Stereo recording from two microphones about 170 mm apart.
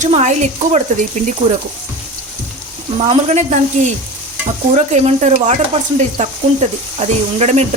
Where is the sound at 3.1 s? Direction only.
40° right (ahead or behind).